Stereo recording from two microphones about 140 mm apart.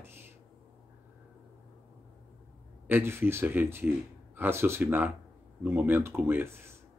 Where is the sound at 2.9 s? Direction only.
15° right (ahead or behind).